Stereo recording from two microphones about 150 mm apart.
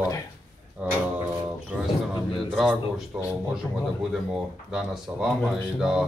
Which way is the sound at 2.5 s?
5° left (ahead or behind).